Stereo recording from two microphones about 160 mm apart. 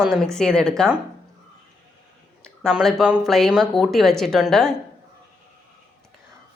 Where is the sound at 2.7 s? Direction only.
Centre (ahead or behind).